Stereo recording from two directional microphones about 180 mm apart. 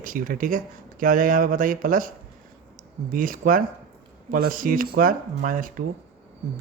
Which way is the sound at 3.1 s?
50° right (ahead or behind).